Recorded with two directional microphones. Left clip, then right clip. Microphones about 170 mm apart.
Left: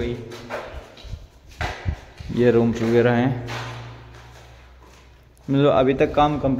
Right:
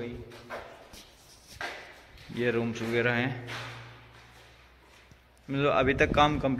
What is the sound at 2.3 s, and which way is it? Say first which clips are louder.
Speech: left 12 dB; 20° left (ahead or behind).